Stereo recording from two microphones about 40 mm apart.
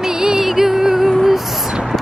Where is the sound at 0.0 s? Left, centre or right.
Centre.